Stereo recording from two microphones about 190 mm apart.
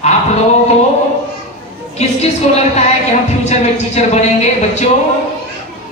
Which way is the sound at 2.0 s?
35° left (ahead or behind).